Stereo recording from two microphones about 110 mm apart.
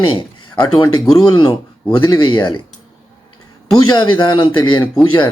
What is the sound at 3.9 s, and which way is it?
Speech, 45° left (ahead or behind).